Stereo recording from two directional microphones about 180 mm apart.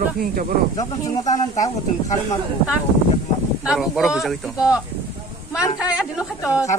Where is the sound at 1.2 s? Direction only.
40° left (ahead or behind).